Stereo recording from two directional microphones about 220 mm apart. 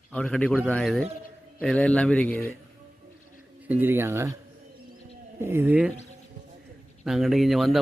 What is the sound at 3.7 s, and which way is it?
Speech, 10° right (ahead or behind).